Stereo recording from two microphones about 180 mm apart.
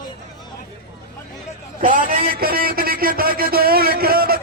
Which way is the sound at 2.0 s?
55° right (ahead or behind).